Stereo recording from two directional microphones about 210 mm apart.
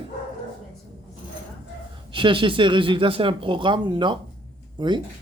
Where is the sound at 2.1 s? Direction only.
25° right (ahead or behind).